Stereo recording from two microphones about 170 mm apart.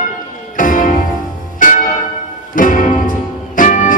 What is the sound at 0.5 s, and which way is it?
Music, 50° left (ahead or behind).